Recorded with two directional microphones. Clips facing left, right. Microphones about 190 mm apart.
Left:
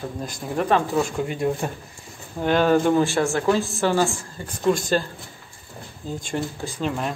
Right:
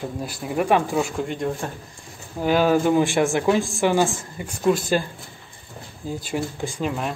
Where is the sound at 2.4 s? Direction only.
5° right (ahead or behind).